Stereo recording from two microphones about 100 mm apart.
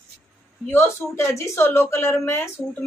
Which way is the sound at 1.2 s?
30° left (ahead or behind).